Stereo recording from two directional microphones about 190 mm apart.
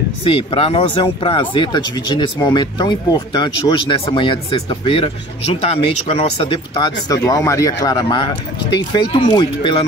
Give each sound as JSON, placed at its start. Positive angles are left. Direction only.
{"t": 0.2, "sound": "speech", "side_deg": 30}